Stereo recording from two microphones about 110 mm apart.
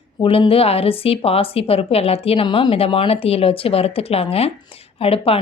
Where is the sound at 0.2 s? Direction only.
55° left (ahead or behind).